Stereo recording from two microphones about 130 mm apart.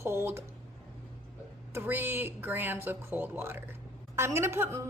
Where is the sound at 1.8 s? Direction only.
15° right (ahead or behind).